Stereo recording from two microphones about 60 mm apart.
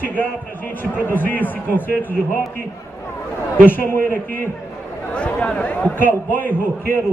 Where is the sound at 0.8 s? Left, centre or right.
Left.